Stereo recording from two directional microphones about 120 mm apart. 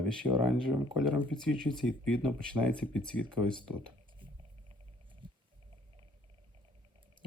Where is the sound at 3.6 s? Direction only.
45° right (ahead or behind).